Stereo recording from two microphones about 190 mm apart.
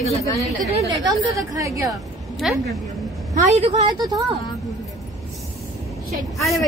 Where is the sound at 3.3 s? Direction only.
40° right (ahead or behind).